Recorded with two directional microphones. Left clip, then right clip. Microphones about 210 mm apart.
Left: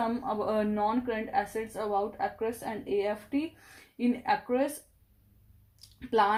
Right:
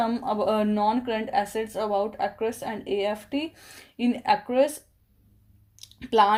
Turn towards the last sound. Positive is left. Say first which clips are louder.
# right 6 dB
turn(degrees=-40)  # may be behind; listen again after turning